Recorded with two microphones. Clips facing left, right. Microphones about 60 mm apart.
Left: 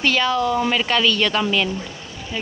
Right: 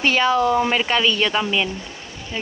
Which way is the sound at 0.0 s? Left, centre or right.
Right.